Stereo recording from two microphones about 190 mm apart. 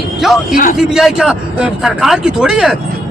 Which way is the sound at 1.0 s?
Centre (ahead or behind).